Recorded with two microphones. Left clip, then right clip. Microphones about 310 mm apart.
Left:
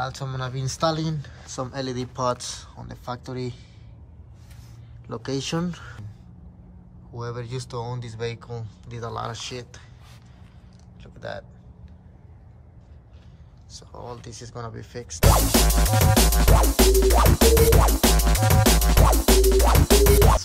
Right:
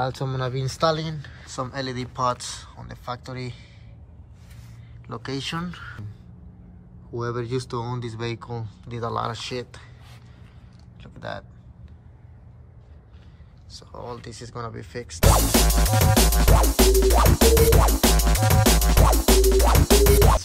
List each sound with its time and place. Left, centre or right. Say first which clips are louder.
0.0 s speech: right 3 dB; centre
5.0 s speech: left 1 dB; centre
7.2 s music: right 6 dB; centre
11.0 s a sound: even; centre
13.7 s speech: right 2 dB; centre
15.1 s music: even; centre